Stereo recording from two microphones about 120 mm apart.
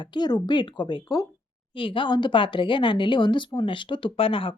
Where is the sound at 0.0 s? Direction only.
40° left (ahead or behind).